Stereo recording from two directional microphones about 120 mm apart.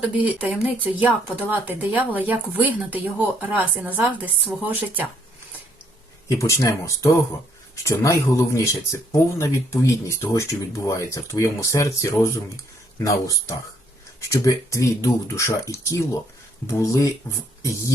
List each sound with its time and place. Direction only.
0.3 s speech: 10° right (ahead or behind)
6.2 s speech: 25° left (ahead or behind)